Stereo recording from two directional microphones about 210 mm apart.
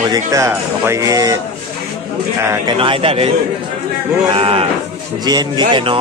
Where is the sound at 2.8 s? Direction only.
25° right (ahead or behind).